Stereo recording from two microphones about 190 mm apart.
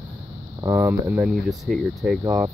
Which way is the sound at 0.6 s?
15° right (ahead or behind).